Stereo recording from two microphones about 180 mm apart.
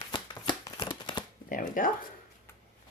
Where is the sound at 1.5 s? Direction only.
50° left (ahead or behind).